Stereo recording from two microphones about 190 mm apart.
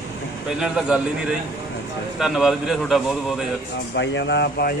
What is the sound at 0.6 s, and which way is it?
Speech, 5° right (ahead or behind).